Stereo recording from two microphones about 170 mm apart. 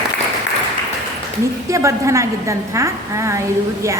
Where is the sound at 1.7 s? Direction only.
20° right (ahead or behind).